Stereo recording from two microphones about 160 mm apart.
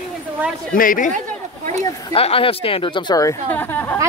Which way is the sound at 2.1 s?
35° left (ahead or behind).